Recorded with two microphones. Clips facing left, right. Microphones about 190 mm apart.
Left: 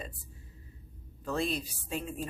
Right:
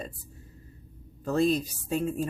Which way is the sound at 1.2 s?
40° right (ahead or behind).